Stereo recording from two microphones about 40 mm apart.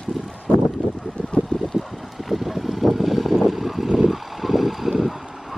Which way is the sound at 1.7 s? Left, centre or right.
Centre.